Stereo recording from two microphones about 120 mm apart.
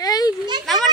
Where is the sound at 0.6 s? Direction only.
Centre (ahead or behind).